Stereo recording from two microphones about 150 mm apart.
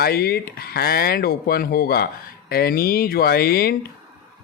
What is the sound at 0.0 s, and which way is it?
Speech, 90° left.